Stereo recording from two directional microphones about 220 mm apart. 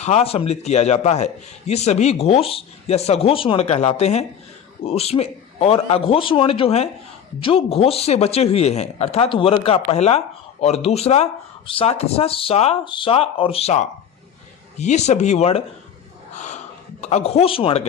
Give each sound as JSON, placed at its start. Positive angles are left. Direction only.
{"t": 0.0, "sound": "a man's voice", "side_deg": 30}
{"t": 16.3, "sound": "a sound", "side_deg": 30}
{"t": 17.0, "sound": "a man's voice", "side_deg": 30}